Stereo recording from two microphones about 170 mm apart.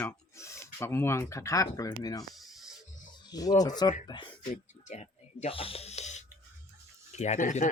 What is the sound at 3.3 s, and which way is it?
Speech, 20° left (ahead or behind).